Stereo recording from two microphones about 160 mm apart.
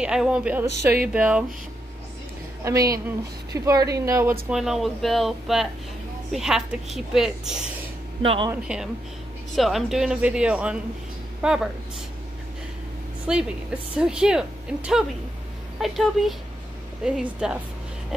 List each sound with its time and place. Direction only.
0.0 s speech: 5° right (ahead or behind)
2.6 s speech: 20° right (ahead or behind)
4.5 s a woman's voice: centre (ahead or behind)
8.2 s speech: 35° right (ahead or behind)
8.5 s a woman's voice: 5° right (ahead or behind)
13.3 s a woman's voice: 5° right (ahead or behind)